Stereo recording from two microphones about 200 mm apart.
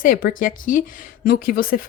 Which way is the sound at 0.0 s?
45° left (ahead or behind).